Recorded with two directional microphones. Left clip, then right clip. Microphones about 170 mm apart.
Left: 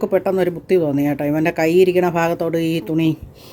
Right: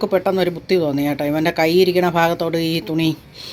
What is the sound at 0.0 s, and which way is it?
Speech, 15° left (ahead or behind).